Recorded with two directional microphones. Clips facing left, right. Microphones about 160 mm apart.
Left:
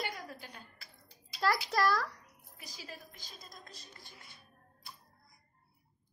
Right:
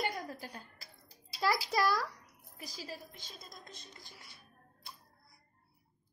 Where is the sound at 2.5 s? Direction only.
35° right (ahead or behind).